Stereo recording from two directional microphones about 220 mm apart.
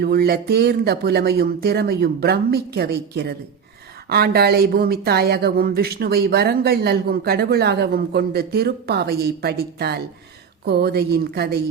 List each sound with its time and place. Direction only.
0.0 s speech: 45° right (ahead or behind)